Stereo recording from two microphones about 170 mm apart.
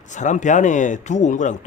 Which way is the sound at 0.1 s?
45° left (ahead or behind).